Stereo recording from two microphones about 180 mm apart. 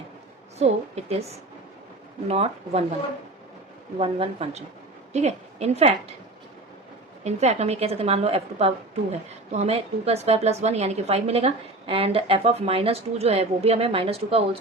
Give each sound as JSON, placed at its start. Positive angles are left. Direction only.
{"t": 0.6, "sound": "a woman's voice", "side_deg": -35}
{"t": 2.2, "sound": "a woman's voice", "side_deg": -35}
{"t": 3.9, "sound": "a woman's voice", "side_deg": -30}
{"t": 7.3, "sound": "a woman's voice", "side_deg": -40}